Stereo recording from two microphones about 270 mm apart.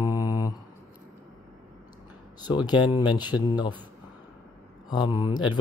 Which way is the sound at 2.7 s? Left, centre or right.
Centre.